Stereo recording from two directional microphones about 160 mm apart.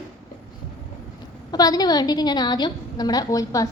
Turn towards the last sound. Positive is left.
turn(degrees=20)  # may be behind; listen again after turning